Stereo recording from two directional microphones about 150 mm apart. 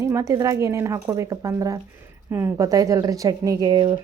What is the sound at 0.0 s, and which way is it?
Speech, 20° right (ahead or behind).